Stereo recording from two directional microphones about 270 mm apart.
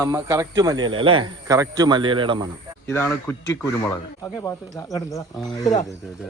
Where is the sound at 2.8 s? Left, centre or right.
Centre.